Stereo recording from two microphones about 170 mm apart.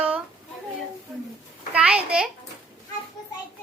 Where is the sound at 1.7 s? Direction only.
5° right (ahead or behind).